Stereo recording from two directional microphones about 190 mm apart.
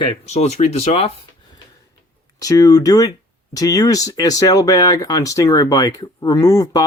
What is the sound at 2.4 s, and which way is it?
Speech, 20° left (ahead or behind).